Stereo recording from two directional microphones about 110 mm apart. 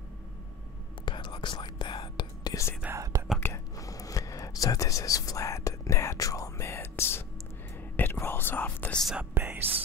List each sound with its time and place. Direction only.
1.0 s whispering: 45° left (ahead or behind)
3.0 s whispering: 25° right (ahead or behind)
3.3 s whispering: 20° left (ahead or behind)
3.7 s whispering: 30° left (ahead or behind)
9.0 s speech: 10° right (ahead or behind)
9.3 s whispering: 20° right (ahead or behind)